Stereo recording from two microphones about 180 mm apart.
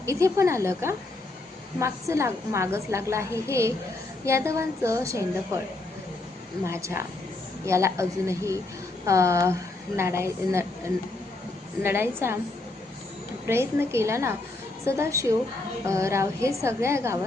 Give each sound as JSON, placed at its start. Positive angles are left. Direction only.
{"t": 0.0, "sound": "a woman's voice", "side_deg": -15}
{"t": 6.7, "sound": "a woman's voice", "side_deg": -15}
{"t": 11.8, "sound": "a woman's voice", "side_deg": -10}
{"t": 13.5, "sound": "a woman's voice", "side_deg": -15}